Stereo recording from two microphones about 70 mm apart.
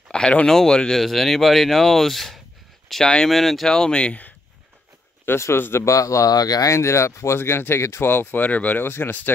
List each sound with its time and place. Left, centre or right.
0.1 s speech: centre
5.2 s speech: left
6.7 s speech: left